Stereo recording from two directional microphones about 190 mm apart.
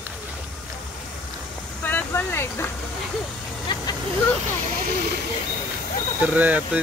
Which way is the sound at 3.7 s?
25° left (ahead or behind).